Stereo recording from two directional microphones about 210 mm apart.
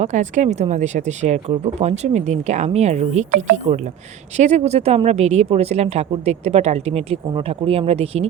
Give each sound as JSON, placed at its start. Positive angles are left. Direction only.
{"t": 0.0, "sound": "speech", "side_deg": -35}
{"t": 4.4, "sound": "a woman's voice", "side_deg": -30}